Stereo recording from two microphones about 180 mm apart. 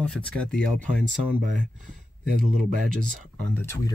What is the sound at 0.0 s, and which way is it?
Speech, 5° left (ahead or behind).